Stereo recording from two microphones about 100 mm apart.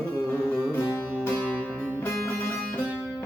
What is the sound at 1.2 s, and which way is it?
Music, 15° left (ahead or behind).